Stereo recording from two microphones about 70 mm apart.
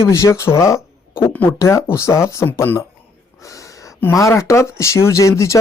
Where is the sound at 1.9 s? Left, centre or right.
Left.